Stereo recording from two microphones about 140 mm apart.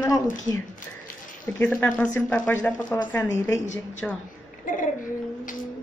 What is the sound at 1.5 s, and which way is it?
Speech, 10° left (ahead or behind).